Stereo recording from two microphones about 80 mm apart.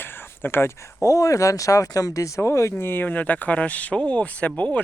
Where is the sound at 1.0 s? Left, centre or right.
Left.